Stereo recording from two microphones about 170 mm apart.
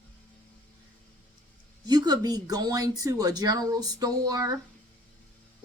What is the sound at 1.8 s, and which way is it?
Speech, 25° right (ahead or behind).